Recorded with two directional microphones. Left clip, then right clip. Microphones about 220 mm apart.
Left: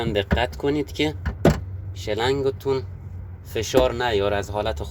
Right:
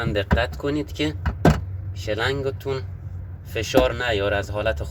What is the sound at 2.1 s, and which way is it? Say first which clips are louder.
Speech: left 2 dB; 25° left (ahead or behind).